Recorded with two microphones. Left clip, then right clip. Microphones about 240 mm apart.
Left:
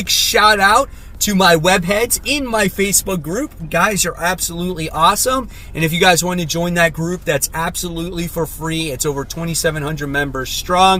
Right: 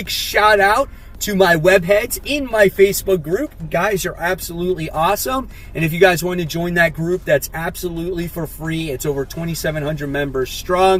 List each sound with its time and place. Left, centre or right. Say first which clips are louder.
0.3 s speech: even; centre